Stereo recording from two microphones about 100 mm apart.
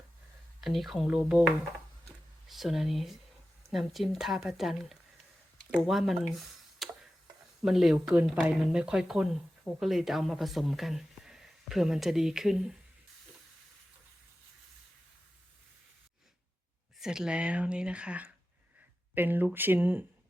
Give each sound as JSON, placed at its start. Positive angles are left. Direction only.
{"t": 0.6, "sound": "speech", "side_deg": 0}
{"t": 2.5, "sound": "speech", "side_deg": 0}
{"t": 6.3, "sound": "a sound", "side_deg": 0}
{"t": 7.6, "sound": "speech", "side_deg": -5}
{"t": 17.0, "sound": "speech", "side_deg": -5}